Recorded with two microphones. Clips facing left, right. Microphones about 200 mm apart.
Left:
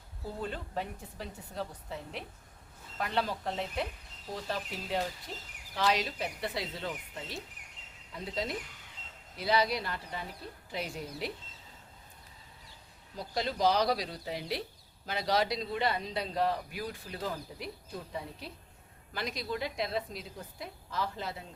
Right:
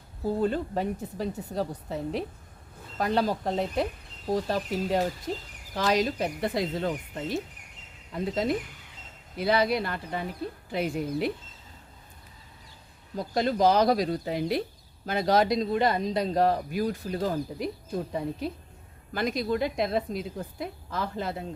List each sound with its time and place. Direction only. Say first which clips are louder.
0.3 s speech: right 9 dB; 40° right (ahead or behind)
13.1 s speech: right 8 dB; 50° right (ahead or behind)